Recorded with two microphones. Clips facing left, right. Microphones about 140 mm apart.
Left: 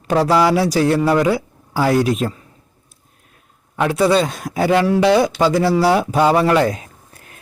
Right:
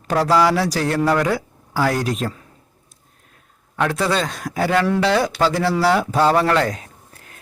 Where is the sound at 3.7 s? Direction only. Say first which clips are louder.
Left 5 dB; 10° left (ahead or behind).